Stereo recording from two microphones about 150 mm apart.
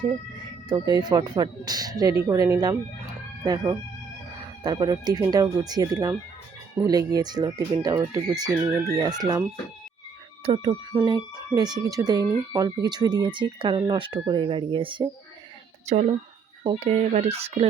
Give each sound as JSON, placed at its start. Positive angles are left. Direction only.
{"t": 0.7, "sound": "speech", "side_deg": -30}
{"t": 10.4, "sound": "speech", "side_deg": -35}
{"t": 10.9, "sound": "speech", "side_deg": -25}
{"t": 15.9, "sound": "speech", "side_deg": -45}